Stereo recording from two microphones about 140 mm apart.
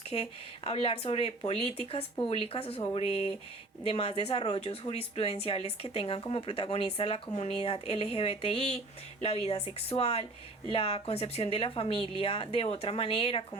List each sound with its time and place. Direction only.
0.1 s a woman's voice: 45° left (ahead or behind)